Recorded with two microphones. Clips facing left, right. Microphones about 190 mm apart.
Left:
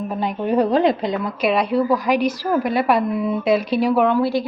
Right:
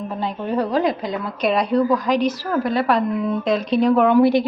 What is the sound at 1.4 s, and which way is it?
A woman's voice, centre (ahead or behind).